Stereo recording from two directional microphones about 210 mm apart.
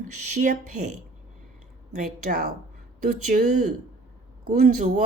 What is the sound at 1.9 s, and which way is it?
Speech, 40° right (ahead or behind).